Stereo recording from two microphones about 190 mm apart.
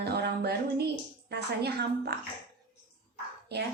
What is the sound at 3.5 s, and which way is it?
Speech, 60° right (ahead or behind).